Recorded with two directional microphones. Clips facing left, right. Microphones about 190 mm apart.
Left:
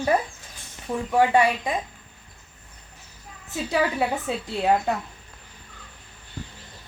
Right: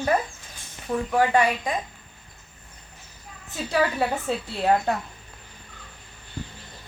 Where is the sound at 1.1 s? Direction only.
25° left (ahead or behind).